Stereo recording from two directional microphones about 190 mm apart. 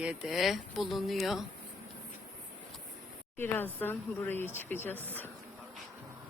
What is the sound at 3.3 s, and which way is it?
Speech, 10° left (ahead or behind).